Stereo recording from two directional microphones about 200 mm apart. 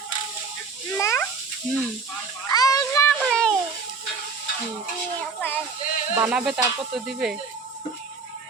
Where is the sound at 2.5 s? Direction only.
20° left (ahead or behind).